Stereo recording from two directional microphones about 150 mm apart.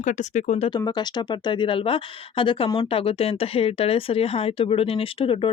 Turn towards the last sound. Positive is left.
turn(degrees=35)  # may be behind; listen again after turning